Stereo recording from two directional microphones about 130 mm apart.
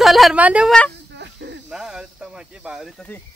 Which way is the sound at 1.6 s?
5° right (ahead or behind).